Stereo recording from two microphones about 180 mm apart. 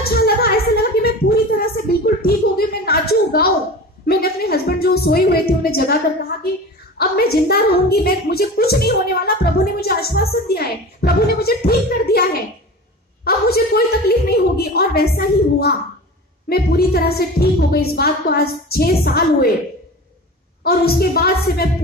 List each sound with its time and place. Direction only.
0.1 s a sound: 60° left (ahead or behind)
7.0 s a woman's voice: 60° left (ahead or behind)
20.6 s a woman's voice: 60° left (ahead or behind)